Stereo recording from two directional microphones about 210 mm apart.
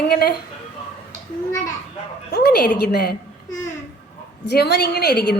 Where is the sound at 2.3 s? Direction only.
50° left (ahead or behind).